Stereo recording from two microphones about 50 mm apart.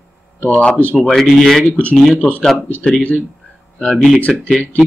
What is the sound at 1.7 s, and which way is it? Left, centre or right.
Speech, left.